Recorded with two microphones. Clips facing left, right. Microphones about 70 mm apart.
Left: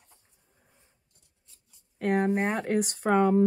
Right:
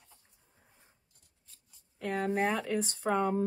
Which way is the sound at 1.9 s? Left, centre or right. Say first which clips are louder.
Left 8 dB; left.